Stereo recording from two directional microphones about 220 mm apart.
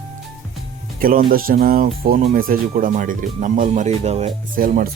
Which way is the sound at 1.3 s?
40° right (ahead or behind).